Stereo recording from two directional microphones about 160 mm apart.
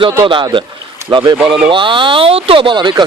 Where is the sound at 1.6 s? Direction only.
30° right (ahead or behind).